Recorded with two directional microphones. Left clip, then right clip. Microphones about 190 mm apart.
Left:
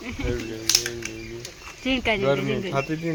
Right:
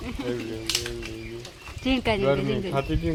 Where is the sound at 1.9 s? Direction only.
5° right (ahead or behind).